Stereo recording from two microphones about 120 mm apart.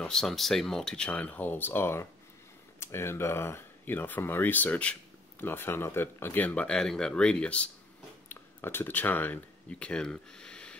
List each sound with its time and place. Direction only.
0.0 s speech: 5° left (ahead or behind)